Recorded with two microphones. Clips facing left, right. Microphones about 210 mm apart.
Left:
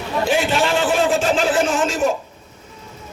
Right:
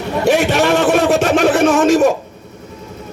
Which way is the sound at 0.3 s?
70° right (ahead or behind).